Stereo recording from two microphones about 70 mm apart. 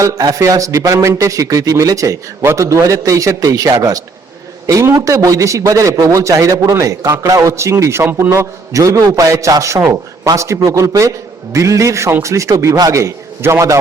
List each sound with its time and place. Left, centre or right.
0.0 s a man's voice: right
4.6 s a man's voice: right
8.7 s a man's voice: right